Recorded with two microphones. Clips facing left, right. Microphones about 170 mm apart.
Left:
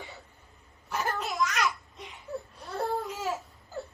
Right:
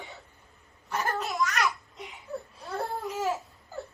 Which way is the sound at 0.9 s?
Centre (ahead or behind).